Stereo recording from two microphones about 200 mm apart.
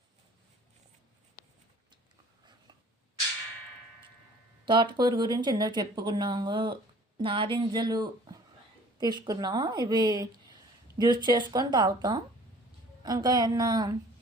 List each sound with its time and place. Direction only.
4.6 s speech: 25° right (ahead or behind)